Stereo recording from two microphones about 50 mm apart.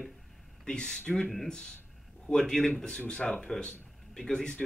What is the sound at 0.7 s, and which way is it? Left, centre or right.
Speech, centre.